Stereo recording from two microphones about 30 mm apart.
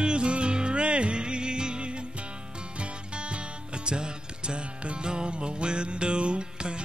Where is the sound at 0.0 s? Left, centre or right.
Right.